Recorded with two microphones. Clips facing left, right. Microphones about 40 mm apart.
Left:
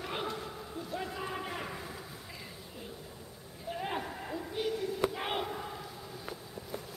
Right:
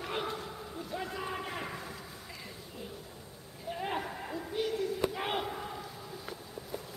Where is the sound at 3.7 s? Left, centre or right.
Centre.